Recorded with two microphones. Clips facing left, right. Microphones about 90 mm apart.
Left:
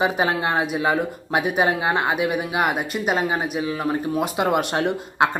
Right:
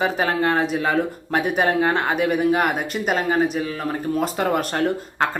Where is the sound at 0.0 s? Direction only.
10° left (ahead or behind).